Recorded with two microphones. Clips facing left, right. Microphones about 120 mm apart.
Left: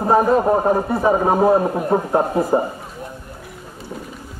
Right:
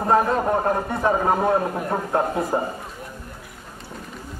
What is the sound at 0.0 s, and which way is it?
Speech, 5° left (ahead or behind).